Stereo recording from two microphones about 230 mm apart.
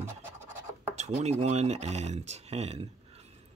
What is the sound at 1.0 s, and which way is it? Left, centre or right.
Speech, right.